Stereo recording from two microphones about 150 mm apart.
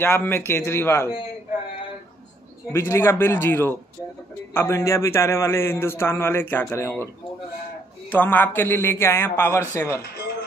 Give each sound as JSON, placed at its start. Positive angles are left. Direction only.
{"t": 0.0, "sound": "a man's voice", "side_deg": 15}
{"t": 2.7, "sound": "a man's voice", "side_deg": 15}
{"t": 8.1, "sound": "a man's voice", "side_deg": 10}